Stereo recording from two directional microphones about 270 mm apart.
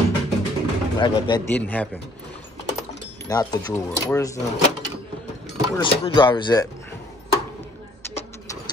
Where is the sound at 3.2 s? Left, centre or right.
Centre.